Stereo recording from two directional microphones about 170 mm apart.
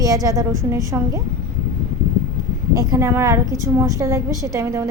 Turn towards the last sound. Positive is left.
turn(degrees=-15)  # may be behind; listen again after turning